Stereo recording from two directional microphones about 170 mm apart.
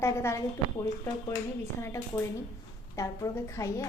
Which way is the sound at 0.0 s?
15° left (ahead or behind).